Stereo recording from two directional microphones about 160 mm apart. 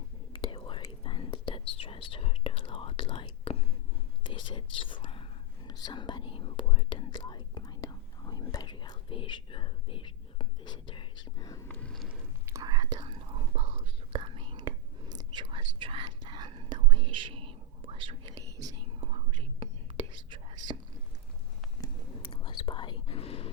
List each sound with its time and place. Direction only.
0.3 s whispering: 30° left (ahead or behind); by 12.0 s 5° left (ahead or behind)
12.5 s whispering: 20° right (ahead or behind)
18.3 s whispering: 20° right (ahead or behind)
18.8 s whispering: 35° right (ahead or behind)
22.2 s whispering: 30° left (ahead or behind)